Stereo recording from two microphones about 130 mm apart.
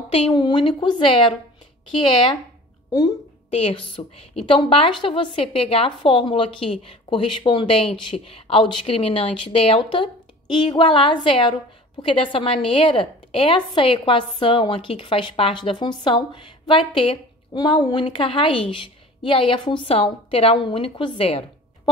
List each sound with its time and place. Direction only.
0.1 s a woman's voice: 40° left (ahead or behind)
3.4 s a woman's voice: 50° left (ahead or behind)